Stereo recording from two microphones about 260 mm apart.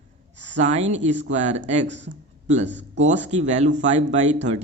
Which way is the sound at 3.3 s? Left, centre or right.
Right.